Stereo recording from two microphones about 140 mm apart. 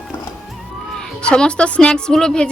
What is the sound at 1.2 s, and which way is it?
A woman's voice, 5° left (ahead or behind).